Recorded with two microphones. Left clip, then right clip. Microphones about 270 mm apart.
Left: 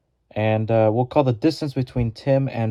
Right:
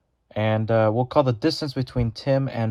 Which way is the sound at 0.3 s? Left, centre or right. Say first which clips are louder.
Left 2 dB; centre.